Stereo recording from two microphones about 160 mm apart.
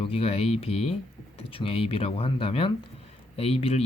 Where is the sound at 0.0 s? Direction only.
40° left (ahead or behind).